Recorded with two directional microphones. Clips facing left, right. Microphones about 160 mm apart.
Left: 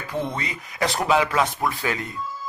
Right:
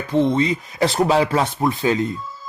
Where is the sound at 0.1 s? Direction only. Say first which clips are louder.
Right 11 dB; 25° right (ahead or behind).